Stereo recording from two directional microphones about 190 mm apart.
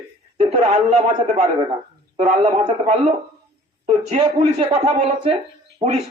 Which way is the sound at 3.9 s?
30° right (ahead or behind).